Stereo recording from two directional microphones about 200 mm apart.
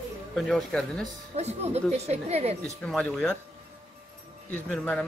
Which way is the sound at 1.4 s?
35° right (ahead or behind).